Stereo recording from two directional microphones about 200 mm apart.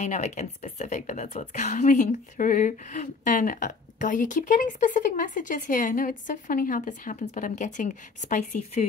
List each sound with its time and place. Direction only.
0.0 s a woman's voice: 35° left (ahead or behind)